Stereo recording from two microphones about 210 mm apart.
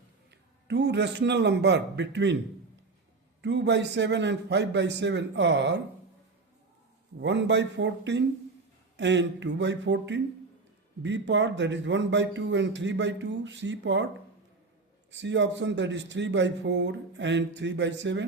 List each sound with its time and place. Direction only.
0.3 s a man's voice: 55° right (ahead or behind)
3.4 s a man's voice: 55° right (ahead or behind)
7.2 s a man's voice: 60° right (ahead or behind)
15.1 s a man's voice: 60° right (ahead or behind)